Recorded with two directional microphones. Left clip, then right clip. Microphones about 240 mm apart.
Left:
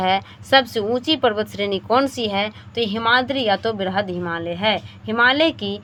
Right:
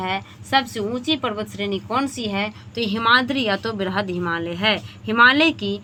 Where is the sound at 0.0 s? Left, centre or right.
Left.